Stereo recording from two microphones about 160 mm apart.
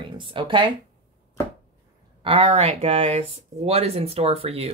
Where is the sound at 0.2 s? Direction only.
30° right (ahead or behind).